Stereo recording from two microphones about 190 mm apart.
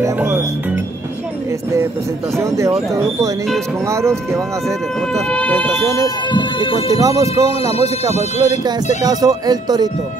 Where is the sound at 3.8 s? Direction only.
15° right (ahead or behind).